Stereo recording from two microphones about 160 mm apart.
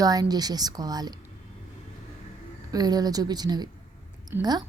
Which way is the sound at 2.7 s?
25° right (ahead or behind).